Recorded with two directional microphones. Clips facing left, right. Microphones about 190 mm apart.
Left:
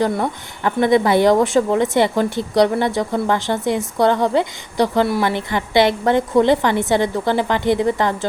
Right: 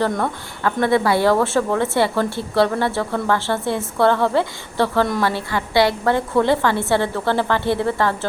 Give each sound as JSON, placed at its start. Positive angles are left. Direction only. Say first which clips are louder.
{"t": 0.0, "sound": "a woman's voice", "louder": "left 2 dB", "side_deg": 15}